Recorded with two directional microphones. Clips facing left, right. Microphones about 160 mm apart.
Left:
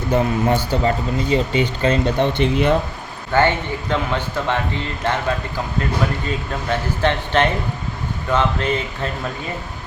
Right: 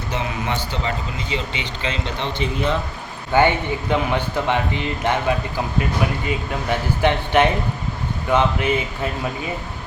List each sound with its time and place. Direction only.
0.2 s speech: 45° left (ahead or behind)
3.3 s a man's voice: 15° right (ahead or behind)
6.2 s a man's voice: 15° right (ahead or behind)